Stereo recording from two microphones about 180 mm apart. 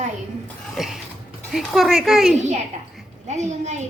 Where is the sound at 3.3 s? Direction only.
40° right (ahead or behind).